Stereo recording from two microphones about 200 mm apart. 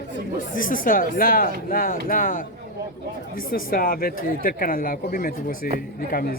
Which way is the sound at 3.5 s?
45° left (ahead or behind).